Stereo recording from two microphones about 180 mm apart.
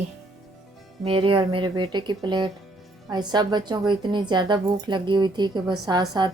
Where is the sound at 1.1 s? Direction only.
30° right (ahead or behind).